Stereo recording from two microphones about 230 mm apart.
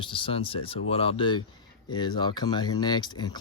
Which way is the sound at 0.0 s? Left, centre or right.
Left.